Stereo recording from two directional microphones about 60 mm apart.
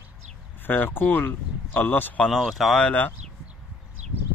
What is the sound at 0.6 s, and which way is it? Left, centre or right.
Speech, left.